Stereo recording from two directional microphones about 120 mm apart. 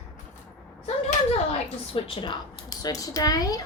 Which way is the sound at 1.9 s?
45° left (ahead or behind).